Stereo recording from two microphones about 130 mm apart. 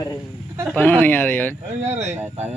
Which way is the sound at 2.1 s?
15° right (ahead or behind).